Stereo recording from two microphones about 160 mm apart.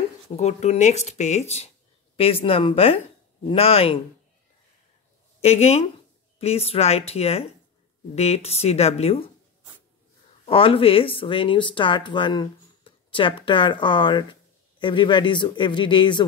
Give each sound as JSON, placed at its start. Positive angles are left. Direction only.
{"t": 0.4, "sound": "speech", "side_deg": 45}
{"t": 5.4, "sound": "speech", "side_deg": 40}
{"t": 10.4, "sound": "a man's voice", "side_deg": 35}